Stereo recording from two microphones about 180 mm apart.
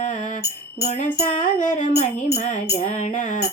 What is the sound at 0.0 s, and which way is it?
Music, 45° left (ahead or behind).